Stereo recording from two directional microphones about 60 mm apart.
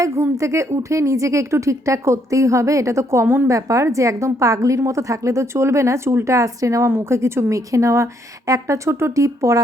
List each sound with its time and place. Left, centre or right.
0.0 s speech: right
6.8 s a woman's voice: right
7.5 s speech: right